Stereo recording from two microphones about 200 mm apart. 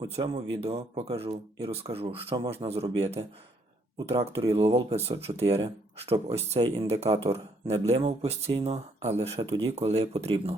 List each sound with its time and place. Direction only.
0.0 s speech: 25° right (ahead or behind)